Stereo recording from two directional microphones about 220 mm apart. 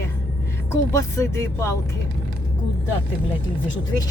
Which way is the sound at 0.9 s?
15° left (ahead or behind).